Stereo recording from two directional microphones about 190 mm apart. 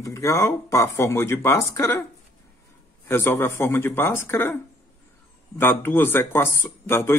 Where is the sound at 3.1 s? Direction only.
10° left (ahead or behind).